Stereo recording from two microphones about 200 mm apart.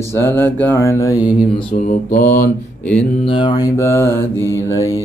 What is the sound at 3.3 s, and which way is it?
Mantra, 20° left (ahead or behind).